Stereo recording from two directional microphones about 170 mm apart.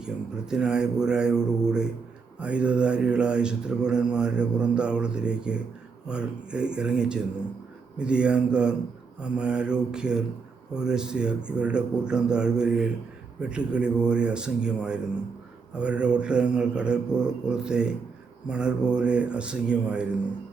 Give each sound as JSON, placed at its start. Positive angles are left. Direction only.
{"t": 0.5, "sound": "mantra", "side_deg": -5}